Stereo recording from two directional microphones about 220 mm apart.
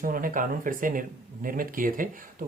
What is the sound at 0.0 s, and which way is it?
Speech, 40° right (ahead or behind).